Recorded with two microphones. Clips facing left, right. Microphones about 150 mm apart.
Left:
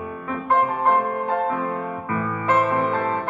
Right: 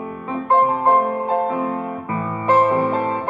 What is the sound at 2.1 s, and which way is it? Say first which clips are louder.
Music: right 4 dB; 25° right (ahead or behind).